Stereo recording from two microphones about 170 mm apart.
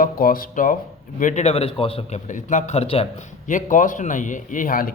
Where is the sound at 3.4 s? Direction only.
50° left (ahead or behind).